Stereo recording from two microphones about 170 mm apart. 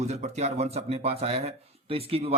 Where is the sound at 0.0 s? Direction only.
40° right (ahead or behind).